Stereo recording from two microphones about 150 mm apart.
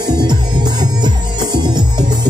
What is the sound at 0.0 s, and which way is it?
Music, 30° right (ahead or behind).